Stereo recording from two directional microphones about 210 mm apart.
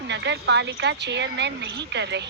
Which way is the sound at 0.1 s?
55° right (ahead or behind).